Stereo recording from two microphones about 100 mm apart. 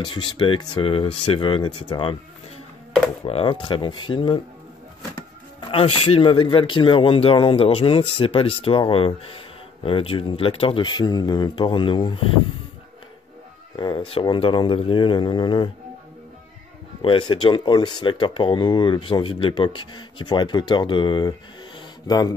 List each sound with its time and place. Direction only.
0.0 s speech: 55° left (ahead or behind)
3.3 s speech: 85° left
3.6 s speech: 55° left (ahead or behind)
5.6 s speech: 65° left (ahead or behind)
10.8 s speech: 45° left (ahead or behind)
13.7 s cat: 50° left (ahead or behind)
14.4 s speech: 55° left (ahead or behind)
17.0 s speech: 60° left (ahead or behind)